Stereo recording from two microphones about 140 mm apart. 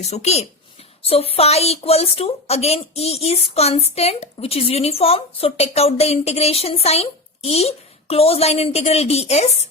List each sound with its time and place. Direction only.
0.0 s a woman's voice: 50° left (ahead or behind)